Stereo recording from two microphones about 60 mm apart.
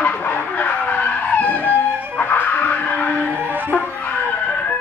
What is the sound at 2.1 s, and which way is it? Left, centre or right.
Music, left.